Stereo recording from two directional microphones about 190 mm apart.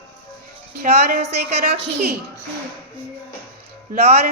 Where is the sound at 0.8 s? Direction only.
45° right (ahead or behind).